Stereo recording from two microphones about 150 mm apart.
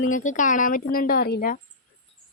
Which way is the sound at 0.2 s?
55° left (ahead or behind).